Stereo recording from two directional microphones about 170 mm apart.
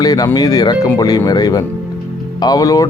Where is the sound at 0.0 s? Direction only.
20° left (ahead or behind).